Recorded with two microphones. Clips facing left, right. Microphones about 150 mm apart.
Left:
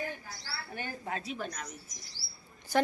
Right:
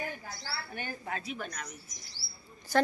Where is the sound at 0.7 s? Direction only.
30° left (ahead or behind).